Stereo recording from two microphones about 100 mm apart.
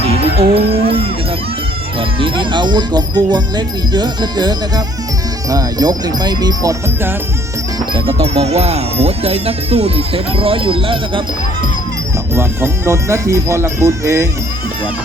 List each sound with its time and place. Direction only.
0.0 s music: 80° right
2.0 s speech: 60° right (ahead or behind); by 6.7 s 40° right (ahead or behind)
7.9 s speech: 80° right
10.3 s speech: 65° right (ahead or behind)
12.3 s speech: 25° right (ahead or behind)